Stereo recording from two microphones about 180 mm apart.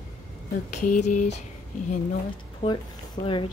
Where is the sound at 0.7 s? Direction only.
45° left (ahead or behind).